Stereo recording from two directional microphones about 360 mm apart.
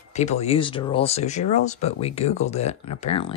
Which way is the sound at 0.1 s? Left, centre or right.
Centre.